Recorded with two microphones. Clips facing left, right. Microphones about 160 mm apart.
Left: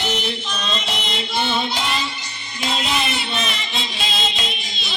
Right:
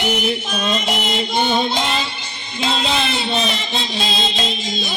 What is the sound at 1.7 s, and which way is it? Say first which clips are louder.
Music: right 3 dB; 20° right (ahead or behind).